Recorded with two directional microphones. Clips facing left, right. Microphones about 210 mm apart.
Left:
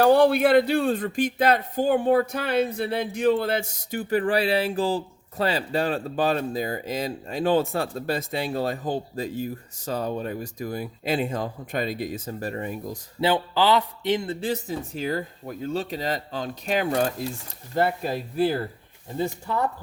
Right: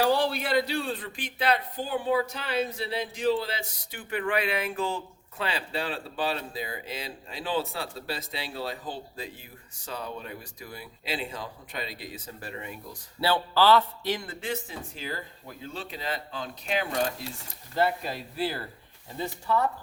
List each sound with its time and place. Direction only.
0.0 s speech: 55° left (ahead or behind)
13.1 s a man's voice: 15° left (ahead or behind); by 18.6 s 45° left (ahead or behind)